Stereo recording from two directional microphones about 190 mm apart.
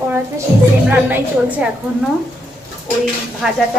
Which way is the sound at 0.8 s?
10° right (ahead or behind).